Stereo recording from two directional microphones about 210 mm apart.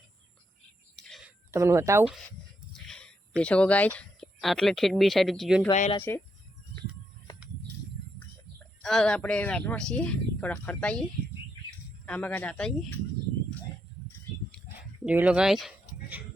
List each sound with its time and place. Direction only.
1.0 s a sound: centre (ahead or behind)
1.5 s speech: 15° right (ahead or behind)
2.8 s speech: 5° left (ahead or behind)
5.7 s speech: 35° left (ahead or behind)
6.0 s speech: 10° left (ahead or behind)
8.5 s speech: centre (ahead or behind)
12.0 s speech: 5° left (ahead or behind)
14.8 s dog: 10° right (ahead or behind)